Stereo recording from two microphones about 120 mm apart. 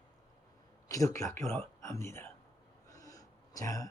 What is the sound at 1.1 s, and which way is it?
Speech, 25° left (ahead or behind).